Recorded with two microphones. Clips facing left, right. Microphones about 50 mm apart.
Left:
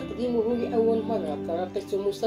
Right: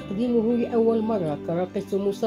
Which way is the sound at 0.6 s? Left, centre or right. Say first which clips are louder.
Right 2 dB; right.